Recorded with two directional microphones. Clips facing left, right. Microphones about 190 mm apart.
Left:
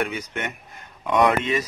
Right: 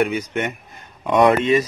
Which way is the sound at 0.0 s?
20° right (ahead or behind).